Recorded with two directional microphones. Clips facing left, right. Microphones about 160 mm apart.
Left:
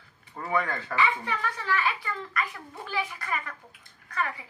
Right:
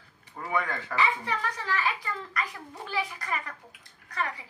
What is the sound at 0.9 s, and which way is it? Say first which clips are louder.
A woman's voice: left 1 dB; 35° right (ahead or behind).